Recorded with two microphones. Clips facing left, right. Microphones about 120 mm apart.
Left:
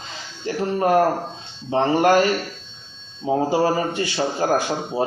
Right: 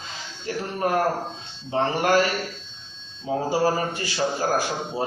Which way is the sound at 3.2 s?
25° left (ahead or behind).